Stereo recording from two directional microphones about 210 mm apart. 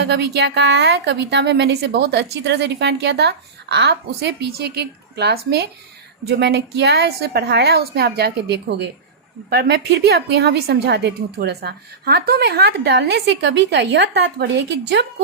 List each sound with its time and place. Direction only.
0.0 s a woman's voice: 50° right (ahead or behind)